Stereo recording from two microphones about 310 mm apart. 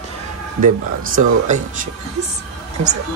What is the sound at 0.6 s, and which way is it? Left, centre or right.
Speech, right.